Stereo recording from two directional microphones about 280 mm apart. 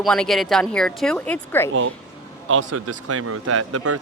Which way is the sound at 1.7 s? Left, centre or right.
Right.